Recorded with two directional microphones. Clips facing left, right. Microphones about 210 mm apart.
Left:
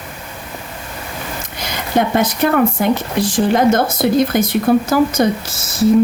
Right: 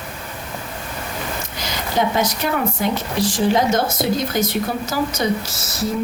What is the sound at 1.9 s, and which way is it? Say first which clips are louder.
Speech: left 4 dB; 55° left (ahead or behind).